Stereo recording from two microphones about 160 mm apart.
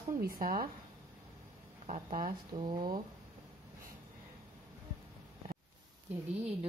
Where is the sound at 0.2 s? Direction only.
65° right (ahead or behind).